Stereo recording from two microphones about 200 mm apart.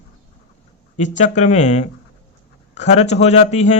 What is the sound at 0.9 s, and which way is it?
A man's voice, 35° left (ahead or behind).